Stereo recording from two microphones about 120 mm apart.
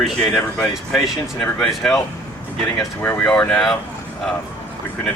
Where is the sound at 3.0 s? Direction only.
10° left (ahead or behind).